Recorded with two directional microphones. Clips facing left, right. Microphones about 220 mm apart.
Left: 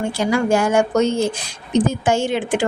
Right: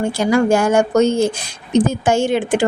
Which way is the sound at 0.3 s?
45° right (ahead or behind).